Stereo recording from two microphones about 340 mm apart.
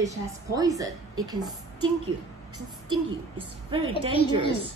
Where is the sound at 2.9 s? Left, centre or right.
Centre.